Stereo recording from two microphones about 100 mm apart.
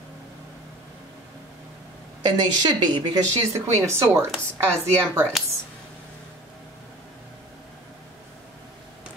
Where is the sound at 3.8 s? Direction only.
30° right (ahead or behind).